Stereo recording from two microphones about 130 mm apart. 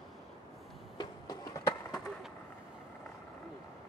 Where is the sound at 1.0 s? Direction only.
30° left (ahead or behind).